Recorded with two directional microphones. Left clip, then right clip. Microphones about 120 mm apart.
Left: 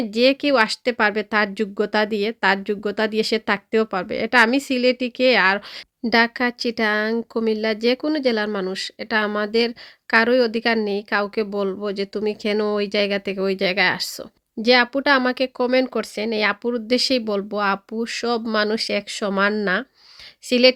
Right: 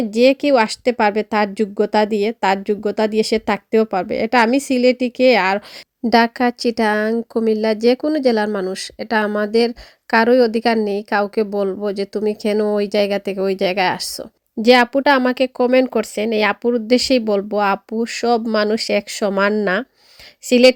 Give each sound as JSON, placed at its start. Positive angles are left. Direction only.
{"t": 0.1, "sound": "speech", "side_deg": -35}
{"t": 8.4, "sound": "speech", "side_deg": -25}
{"t": 8.7, "sound": "speech", "side_deg": -40}
{"t": 14.6, "sound": "speech", "side_deg": -45}
{"t": 20.5, "sound": "speech", "side_deg": -45}